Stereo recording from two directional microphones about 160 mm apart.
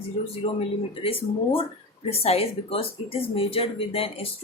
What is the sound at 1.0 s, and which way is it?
A woman's voice, 35° left (ahead or behind).